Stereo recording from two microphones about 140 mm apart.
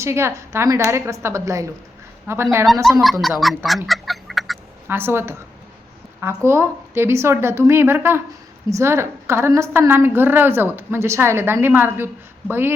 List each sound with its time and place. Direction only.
0.0 s a woman's voice: 20° right (ahead or behind)
3.0 s speech: centre (ahead or behind)
4.9 s a woman's voice: 15° right (ahead or behind)